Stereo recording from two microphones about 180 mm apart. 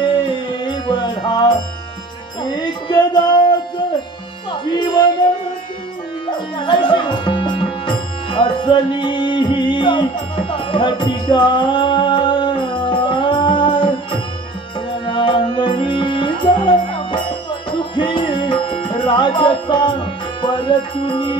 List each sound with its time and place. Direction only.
0.0 s music: 25° left (ahead or behind)
6.3 s music: 25° left (ahead or behind)